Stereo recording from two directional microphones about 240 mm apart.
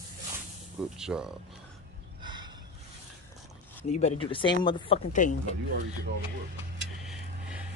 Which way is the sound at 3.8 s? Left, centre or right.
Left.